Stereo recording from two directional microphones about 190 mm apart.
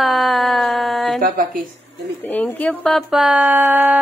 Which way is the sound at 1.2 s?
45° right (ahead or behind).